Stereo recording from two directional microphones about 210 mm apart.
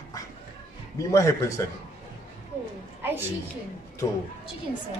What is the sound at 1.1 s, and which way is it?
Speech, 15° left (ahead or behind).